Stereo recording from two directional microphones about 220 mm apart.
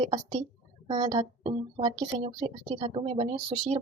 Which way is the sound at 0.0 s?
25° right (ahead or behind).